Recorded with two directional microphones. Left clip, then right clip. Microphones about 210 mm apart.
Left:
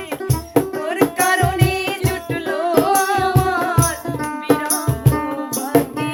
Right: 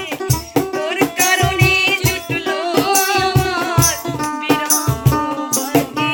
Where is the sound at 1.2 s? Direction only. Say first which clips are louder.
Right 2 dB; 5° right (ahead or behind).